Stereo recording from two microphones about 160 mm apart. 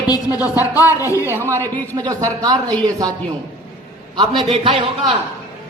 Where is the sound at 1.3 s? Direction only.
15° right (ahead or behind).